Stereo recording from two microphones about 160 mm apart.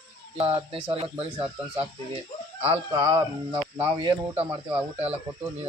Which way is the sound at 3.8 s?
35° right (ahead or behind).